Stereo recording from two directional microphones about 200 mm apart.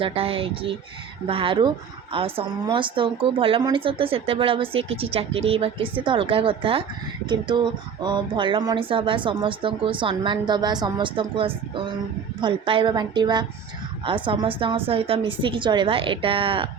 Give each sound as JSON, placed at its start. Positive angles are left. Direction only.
{"t": 0.0, "sound": "speech", "side_deg": -30}